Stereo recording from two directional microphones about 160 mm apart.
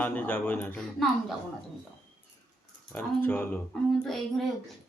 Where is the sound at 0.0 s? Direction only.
10° left (ahead or behind).